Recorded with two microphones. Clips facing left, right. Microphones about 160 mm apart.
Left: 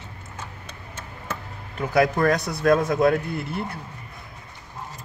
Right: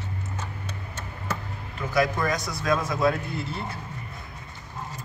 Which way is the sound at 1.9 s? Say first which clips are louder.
Left 5 dB; 60° left (ahead or behind).